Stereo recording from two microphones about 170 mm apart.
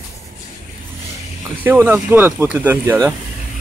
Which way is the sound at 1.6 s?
10° right (ahead or behind).